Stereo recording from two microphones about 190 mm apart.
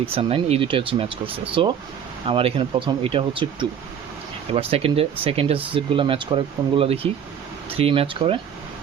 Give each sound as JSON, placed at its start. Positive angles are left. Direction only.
{"t": 0.0, "sound": "speech", "side_deg": -30}